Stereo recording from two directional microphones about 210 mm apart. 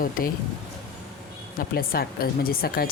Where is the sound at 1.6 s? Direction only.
45° left (ahead or behind).